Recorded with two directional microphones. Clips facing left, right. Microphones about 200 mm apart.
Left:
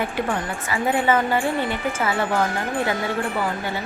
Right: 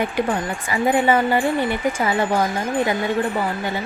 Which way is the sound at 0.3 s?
15° right (ahead or behind).